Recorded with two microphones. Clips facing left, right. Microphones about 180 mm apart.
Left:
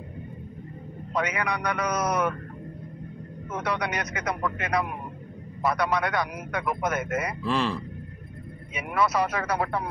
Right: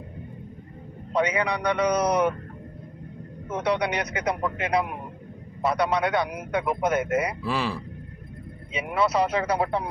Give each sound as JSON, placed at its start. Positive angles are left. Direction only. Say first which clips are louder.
{"t": 1.1, "sound": "a man's voice", "louder": "right 4 dB", "side_deg": -30}
{"t": 3.5, "sound": "a man's voice", "louder": "right 4 dB", "side_deg": -30}
{"t": 7.4, "sound": "speech", "louder": "left 1 dB", "side_deg": -10}
{"t": 8.7, "sound": "a man's voice", "louder": "right 2 dB", "side_deg": -25}